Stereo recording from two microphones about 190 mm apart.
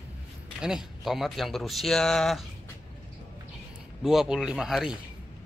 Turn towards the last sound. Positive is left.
turn(degrees=-5)  # may be behind; listen again after turning